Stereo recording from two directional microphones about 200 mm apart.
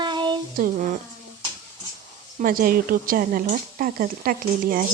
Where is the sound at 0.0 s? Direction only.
20° right (ahead or behind).